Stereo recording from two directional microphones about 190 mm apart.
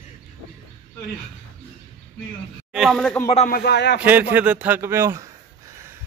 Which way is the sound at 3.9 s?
10° right (ahead or behind).